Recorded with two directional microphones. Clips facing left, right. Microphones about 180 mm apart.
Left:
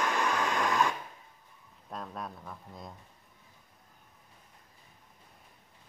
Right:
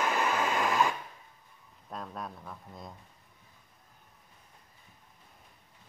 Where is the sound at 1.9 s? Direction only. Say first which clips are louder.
Even; centre (ahead or behind).